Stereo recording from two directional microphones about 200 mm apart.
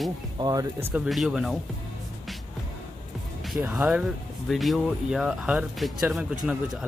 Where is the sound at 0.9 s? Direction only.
5° right (ahead or behind).